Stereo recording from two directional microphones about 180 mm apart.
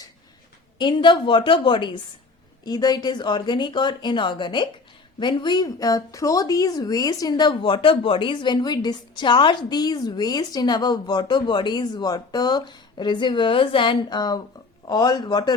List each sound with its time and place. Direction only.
0.8 s a woman's voice: 25° left (ahead or behind)